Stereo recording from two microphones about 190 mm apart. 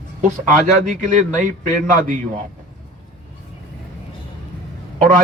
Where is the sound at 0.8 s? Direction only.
45° right (ahead or behind).